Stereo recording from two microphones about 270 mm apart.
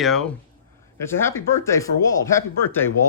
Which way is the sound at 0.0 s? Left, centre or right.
Centre.